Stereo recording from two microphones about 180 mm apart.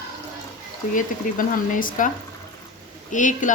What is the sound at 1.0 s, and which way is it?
A woman's voice, 50° left (ahead or behind).